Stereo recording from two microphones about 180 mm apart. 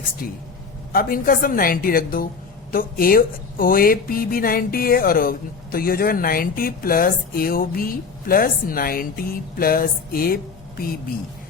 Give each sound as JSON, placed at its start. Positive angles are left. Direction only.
{"t": 0.9, "sound": "speech", "side_deg": 55}